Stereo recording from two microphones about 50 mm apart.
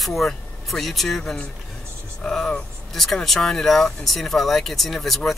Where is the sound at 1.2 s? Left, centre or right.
Centre.